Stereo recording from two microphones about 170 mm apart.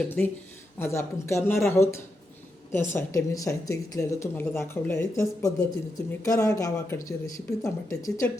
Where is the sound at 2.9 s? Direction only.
20° left (ahead or behind).